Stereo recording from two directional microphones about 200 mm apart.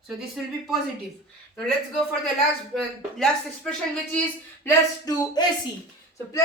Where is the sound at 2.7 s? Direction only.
Centre (ahead or behind).